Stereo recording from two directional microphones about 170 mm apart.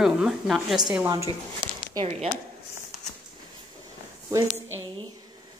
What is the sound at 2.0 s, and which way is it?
Speech, 35° right (ahead or behind).